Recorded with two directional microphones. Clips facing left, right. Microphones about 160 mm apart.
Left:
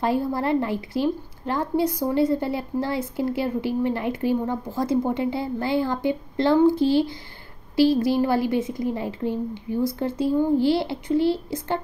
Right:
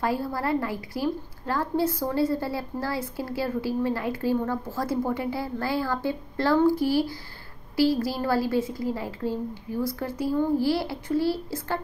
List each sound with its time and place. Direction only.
0.0 s a woman's voice: 20° left (ahead or behind)